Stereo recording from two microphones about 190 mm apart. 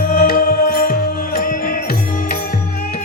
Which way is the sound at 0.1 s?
50° left (ahead or behind).